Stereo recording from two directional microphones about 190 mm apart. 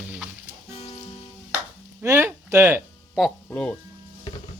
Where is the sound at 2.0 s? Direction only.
15° right (ahead or behind).